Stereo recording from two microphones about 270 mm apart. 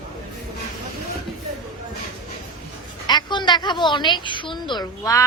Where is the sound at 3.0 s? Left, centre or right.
Centre.